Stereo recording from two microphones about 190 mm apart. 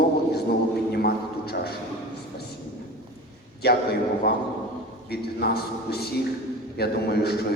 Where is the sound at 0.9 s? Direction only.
55° left (ahead or behind).